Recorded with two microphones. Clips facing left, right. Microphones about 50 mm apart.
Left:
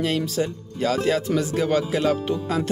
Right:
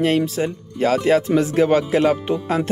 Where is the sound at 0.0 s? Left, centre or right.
Right.